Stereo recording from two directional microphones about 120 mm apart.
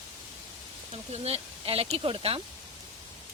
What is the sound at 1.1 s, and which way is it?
Speech, 60° right (ahead or behind).